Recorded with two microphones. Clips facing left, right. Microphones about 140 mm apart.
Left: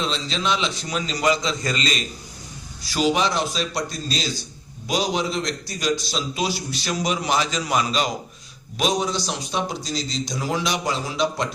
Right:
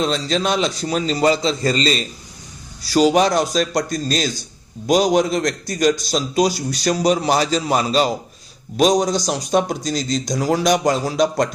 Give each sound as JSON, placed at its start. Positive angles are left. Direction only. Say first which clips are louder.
{"t": 0.0, "sound": "a man's voice", "louder": "right 6 dB", "side_deg": -45}